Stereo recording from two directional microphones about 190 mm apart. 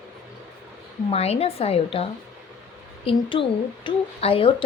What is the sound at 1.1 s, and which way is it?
A woman's voice, 35° left (ahead or behind).